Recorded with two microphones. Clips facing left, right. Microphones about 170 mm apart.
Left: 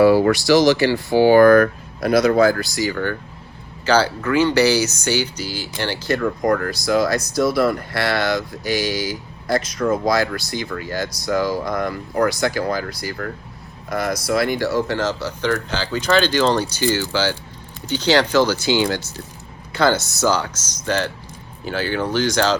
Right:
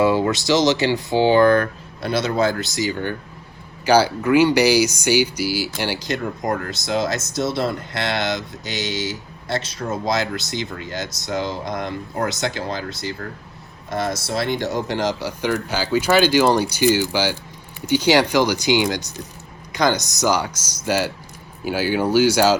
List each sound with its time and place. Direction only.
0.3 s speech: 20° right (ahead or behind)